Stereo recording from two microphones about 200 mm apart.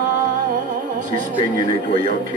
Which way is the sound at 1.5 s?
40° right (ahead or behind).